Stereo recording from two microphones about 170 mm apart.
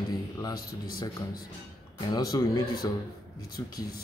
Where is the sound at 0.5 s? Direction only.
60° left (ahead or behind).